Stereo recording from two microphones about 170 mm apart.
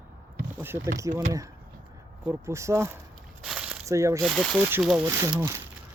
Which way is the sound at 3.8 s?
15° right (ahead or behind).